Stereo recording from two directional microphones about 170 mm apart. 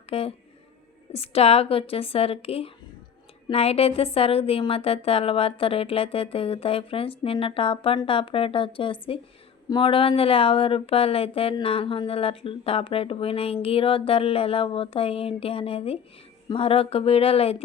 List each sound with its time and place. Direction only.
0.1 s speech: 35° left (ahead or behind)